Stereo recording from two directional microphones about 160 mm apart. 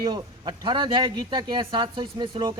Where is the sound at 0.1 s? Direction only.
30° right (ahead or behind).